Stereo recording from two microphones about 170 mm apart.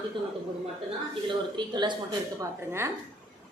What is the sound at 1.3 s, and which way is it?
Speech, 25° right (ahead or behind).